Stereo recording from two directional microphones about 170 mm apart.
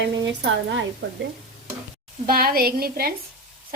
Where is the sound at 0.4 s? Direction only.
90° right.